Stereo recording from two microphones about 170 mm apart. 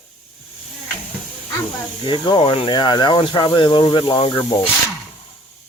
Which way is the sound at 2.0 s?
30° left (ahead or behind).